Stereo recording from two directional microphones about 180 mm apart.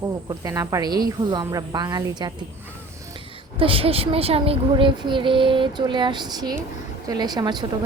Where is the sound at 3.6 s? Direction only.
30° right (ahead or behind).